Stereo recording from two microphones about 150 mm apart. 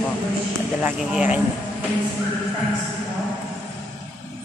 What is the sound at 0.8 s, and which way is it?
Speech, 10° right (ahead or behind).